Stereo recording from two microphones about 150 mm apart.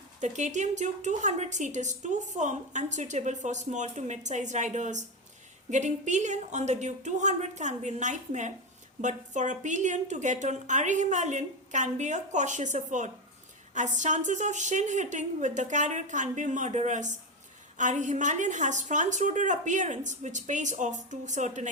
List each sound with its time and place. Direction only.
0.2 s a woman's voice: 50° right (ahead or behind)